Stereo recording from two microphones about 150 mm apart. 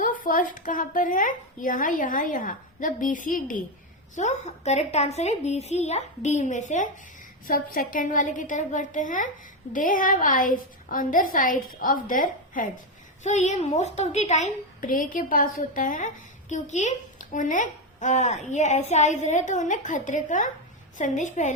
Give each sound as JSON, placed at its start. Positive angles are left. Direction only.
{"t": 0.0, "sound": "speech", "side_deg": 65}
{"t": 4.1, "sound": "a woman's voice", "side_deg": 50}
{"t": 7.4, "sound": "speech", "side_deg": 70}
{"t": 13.2, "sound": "a woman's voice", "side_deg": 50}